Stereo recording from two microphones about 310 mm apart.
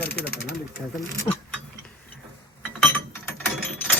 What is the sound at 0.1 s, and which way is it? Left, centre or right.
Pigeon, left.